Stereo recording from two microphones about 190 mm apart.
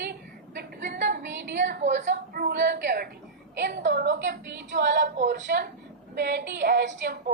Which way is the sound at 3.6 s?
65° right (ahead or behind).